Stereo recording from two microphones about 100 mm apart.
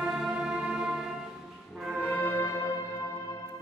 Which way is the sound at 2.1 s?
20° left (ahead or behind).